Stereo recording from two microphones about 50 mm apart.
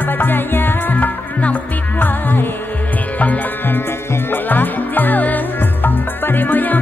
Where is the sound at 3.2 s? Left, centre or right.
Left.